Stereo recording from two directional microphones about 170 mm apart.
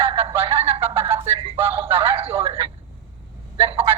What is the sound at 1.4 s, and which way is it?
A man's voice, 30° right (ahead or behind).